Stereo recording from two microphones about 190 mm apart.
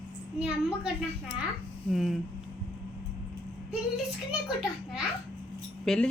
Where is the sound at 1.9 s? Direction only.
Centre (ahead or behind).